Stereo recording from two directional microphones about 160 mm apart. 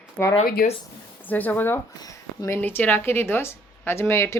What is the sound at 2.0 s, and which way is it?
Speech, 20° left (ahead or behind).